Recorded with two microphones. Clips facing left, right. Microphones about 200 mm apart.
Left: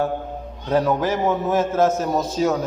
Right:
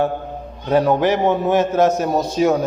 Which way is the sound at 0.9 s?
75° right (ahead or behind).